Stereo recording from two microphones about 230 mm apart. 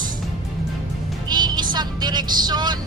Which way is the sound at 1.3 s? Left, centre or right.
Centre.